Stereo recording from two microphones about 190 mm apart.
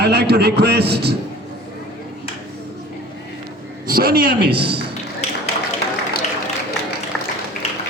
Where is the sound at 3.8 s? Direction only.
55° right (ahead or behind).